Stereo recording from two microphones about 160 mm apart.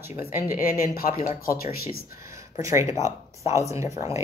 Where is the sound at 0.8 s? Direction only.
70° left (ahead or behind).